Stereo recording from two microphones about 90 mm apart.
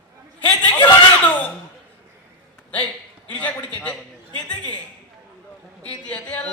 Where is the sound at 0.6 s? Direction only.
60° left (ahead or behind).